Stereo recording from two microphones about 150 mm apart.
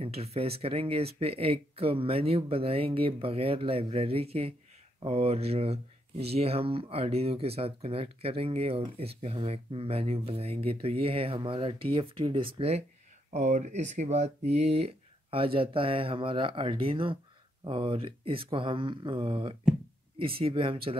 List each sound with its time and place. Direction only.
0.0 s speech: 40° right (ahead or behind)
13.3 s speech: 55° right (ahead or behind); by 21.0 s 35° right (ahead or behind)